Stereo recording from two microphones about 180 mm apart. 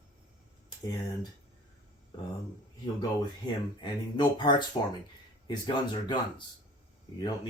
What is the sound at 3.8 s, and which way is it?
Speech, 25° left (ahead or behind).